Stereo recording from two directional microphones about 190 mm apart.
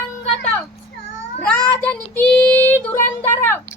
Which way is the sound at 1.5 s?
5° left (ahead or behind).